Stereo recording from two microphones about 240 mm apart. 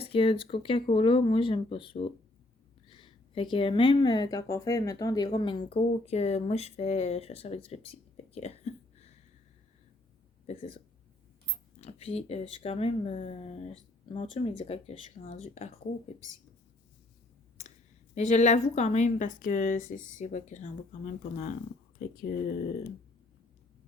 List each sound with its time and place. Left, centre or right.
0.0 s speech: left
10.4 s speech: left
11.8 s speech: left
17.6 s a sound: left
18.1 s speech: left